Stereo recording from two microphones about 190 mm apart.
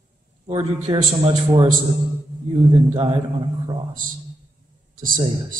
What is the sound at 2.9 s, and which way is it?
Speech, 25° right (ahead or behind).